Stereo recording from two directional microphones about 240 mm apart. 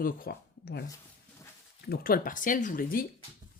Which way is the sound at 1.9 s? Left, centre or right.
Left.